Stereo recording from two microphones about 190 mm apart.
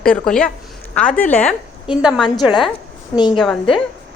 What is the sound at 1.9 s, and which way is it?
Speech, 5° right (ahead or behind).